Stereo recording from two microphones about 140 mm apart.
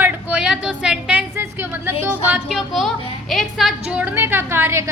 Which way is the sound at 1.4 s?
15° right (ahead or behind).